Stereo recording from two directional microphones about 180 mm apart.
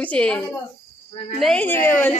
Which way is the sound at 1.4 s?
5° left (ahead or behind).